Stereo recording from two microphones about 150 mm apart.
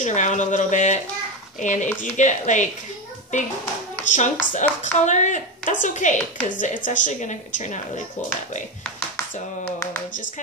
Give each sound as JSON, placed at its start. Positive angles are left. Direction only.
{"t": 0.0, "sound": "a woman's voice", "side_deg": 55}
{"t": 4.1, "sound": "a woman's voice", "side_deg": 55}
{"t": 9.7, "sound": "a sound", "side_deg": 15}